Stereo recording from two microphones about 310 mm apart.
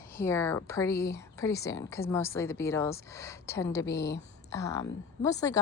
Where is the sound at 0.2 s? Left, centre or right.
Centre.